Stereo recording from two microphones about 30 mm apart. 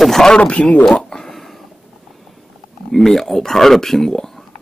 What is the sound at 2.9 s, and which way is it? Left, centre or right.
Speech, centre.